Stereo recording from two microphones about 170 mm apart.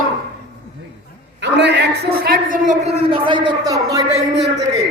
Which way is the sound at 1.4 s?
90° right.